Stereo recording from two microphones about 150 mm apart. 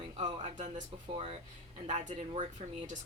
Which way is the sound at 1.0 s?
40° right (ahead or behind).